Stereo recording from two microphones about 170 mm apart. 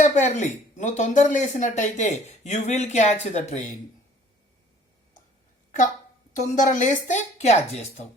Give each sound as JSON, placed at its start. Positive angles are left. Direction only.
{"t": 0.0, "sound": "speech", "side_deg": 45}
{"t": 6.4, "sound": "speech", "side_deg": 45}